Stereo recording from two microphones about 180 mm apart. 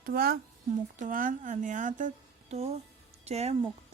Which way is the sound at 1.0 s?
50° right (ahead or behind).